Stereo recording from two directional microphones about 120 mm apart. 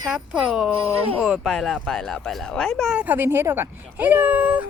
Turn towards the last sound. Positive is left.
turn(degrees=-15)  # may be behind; listen again after turning